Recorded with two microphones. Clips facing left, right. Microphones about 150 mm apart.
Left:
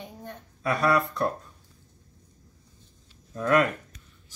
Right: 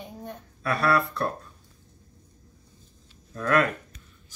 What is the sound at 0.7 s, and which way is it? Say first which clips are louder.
Speech: even; 15° left (ahead or behind).